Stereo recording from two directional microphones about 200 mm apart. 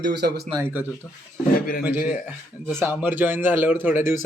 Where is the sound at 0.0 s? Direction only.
55° right (ahead or behind).